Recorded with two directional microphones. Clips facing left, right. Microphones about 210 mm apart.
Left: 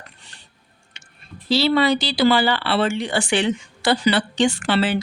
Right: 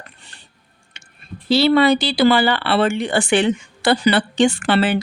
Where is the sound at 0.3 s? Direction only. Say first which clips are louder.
Right 1 dB; 55° right (ahead or behind).